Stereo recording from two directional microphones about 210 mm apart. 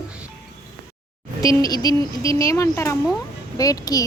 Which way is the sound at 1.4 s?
15° left (ahead or behind).